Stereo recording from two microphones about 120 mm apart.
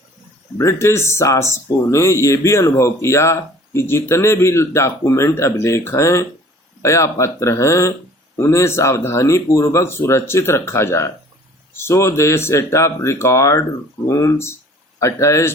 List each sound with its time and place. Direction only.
0.6 s speech: 25° left (ahead or behind)